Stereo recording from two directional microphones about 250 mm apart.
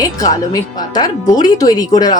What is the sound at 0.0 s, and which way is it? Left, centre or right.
A woman's voice, centre.